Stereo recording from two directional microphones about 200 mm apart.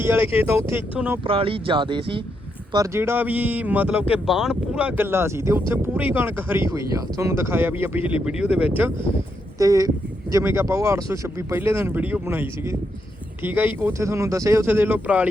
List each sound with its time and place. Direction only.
0.0 s speech: 10° right (ahead or behind)
1.2 s speech: 25° right (ahead or behind)
2.7 s speech: 15° right (ahead or behind)